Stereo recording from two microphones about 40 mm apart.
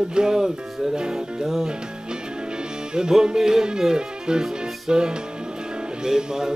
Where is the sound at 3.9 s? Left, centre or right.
Centre.